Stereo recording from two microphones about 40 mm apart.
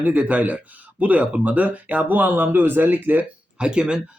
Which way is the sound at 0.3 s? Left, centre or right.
Right.